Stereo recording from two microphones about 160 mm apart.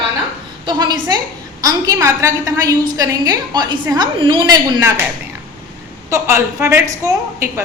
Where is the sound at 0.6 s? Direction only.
30° right (ahead or behind).